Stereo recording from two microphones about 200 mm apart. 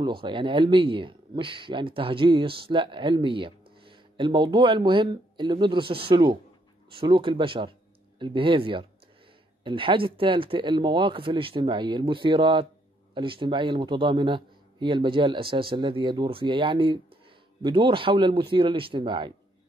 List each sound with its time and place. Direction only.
0.0 s speech: 25° right (ahead or behind)